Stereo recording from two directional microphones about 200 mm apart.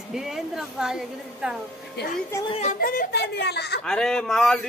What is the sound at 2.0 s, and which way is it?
Speech, 55° left (ahead or behind).